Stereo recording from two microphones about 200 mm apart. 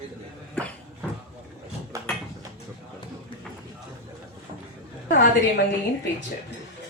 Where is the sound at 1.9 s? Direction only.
15° right (ahead or behind).